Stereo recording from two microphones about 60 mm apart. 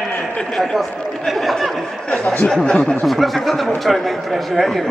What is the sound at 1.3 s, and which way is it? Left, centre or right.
Speech, centre.